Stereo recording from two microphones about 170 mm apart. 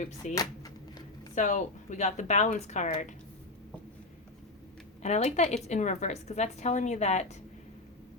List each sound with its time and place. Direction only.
0.3 s a sound: 20° left (ahead or behind)
1.4 s speech: 45° left (ahead or behind)
5.0 s speech: 40° left (ahead or behind)